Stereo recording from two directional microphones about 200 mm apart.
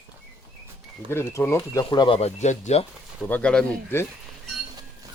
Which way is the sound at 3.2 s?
5° left (ahead or behind).